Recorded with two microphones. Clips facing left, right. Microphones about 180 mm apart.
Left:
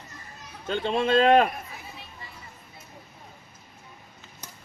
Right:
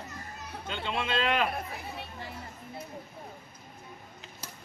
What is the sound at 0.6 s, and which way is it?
Speech, 45° left (ahead or behind).